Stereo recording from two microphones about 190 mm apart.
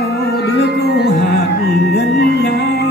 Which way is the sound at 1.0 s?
60° left (ahead or behind).